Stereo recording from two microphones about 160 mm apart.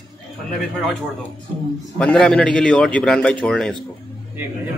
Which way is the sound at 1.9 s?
5° left (ahead or behind).